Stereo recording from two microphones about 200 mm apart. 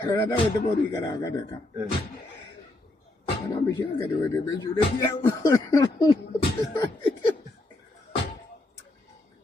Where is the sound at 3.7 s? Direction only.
15° left (ahead or behind).